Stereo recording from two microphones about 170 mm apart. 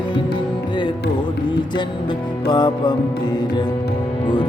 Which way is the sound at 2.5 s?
25° left (ahead or behind).